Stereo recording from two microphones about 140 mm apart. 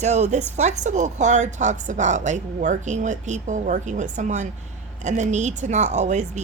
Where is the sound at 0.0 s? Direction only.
55° right (ahead or behind).